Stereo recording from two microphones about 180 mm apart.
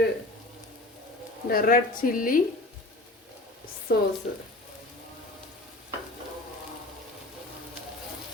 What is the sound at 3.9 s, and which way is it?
Speech, 65° left (ahead or behind).